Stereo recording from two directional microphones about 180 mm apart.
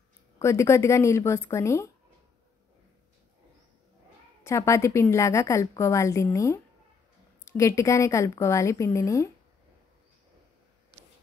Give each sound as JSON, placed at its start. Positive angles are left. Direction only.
{"t": 0.4, "sound": "a woman's voice", "side_deg": 15}
{"t": 4.4, "sound": "a woman's voice", "side_deg": 15}